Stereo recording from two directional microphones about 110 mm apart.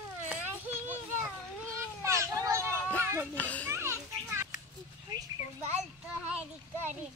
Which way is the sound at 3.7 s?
25° right (ahead or behind).